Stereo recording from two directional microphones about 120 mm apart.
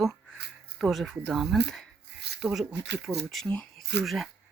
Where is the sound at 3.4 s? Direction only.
10° left (ahead or behind).